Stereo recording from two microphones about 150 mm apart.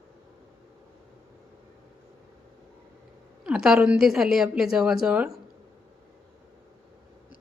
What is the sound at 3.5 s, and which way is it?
A woman's voice, 5° right (ahead or behind).